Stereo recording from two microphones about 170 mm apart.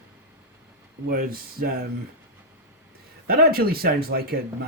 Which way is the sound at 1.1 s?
60° right (ahead or behind).